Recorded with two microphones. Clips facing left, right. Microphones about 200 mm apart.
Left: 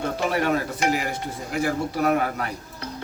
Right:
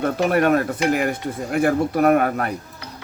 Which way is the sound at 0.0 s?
55° right (ahead or behind).